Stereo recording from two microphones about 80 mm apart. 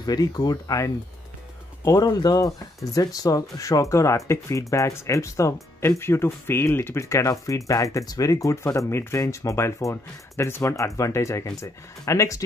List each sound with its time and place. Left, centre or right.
0.0 s speech: left